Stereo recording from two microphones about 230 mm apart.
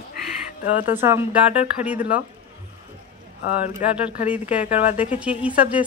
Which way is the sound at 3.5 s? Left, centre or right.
Centre.